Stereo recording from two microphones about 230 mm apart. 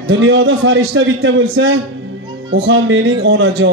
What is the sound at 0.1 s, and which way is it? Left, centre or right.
A man's voice, right.